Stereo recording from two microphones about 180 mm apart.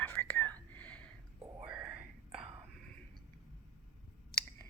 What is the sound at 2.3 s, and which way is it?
Whispering, 35° right (ahead or behind).